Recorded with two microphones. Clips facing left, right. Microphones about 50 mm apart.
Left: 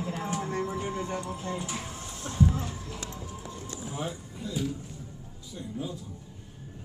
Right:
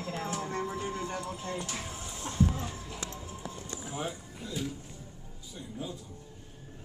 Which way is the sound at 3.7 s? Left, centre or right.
Centre.